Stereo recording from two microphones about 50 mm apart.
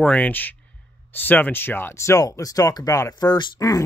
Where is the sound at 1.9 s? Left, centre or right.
Left.